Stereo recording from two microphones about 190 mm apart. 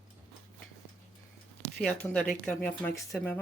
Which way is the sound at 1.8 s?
5° left (ahead or behind).